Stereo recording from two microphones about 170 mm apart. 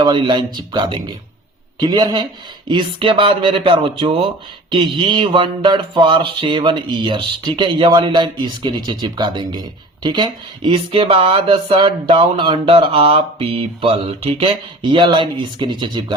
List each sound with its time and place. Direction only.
0.0 s mantra: 25° right (ahead or behind)
2.6 s speech: 30° right (ahead or behind)
4.7 s mantra: 30° right (ahead or behind)